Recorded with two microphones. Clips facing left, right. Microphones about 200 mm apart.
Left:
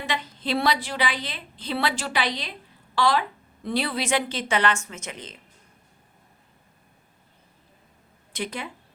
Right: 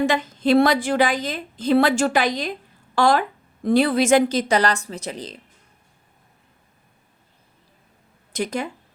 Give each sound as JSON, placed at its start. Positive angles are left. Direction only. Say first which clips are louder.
{"t": 0.0, "sound": "a woman's voice", "louder": "right 10 dB", "side_deg": -45}
{"t": 8.3, "sound": "speech", "louder": "right 7 dB", "side_deg": -45}